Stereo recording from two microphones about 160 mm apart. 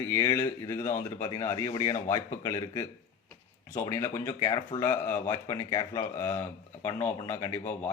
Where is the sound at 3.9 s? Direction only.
15° left (ahead or behind).